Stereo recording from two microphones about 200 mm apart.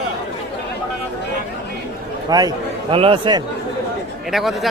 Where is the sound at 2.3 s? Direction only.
20° right (ahead or behind).